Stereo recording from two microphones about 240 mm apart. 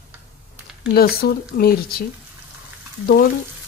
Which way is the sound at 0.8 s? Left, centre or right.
Left.